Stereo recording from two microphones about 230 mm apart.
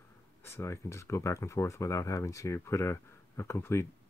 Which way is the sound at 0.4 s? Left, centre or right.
Centre.